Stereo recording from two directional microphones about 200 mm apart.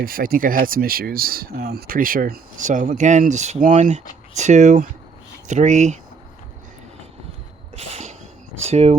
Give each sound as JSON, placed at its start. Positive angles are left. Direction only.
{"t": 0.0, "sound": "speech", "side_deg": -45}
{"t": 7.8, "sound": "a sound", "side_deg": -35}
{"t": 8.7, "sound": "speech", "side_deg": -30}